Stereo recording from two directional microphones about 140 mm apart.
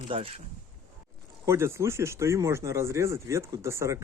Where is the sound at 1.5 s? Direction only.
20° right (ahead or behind).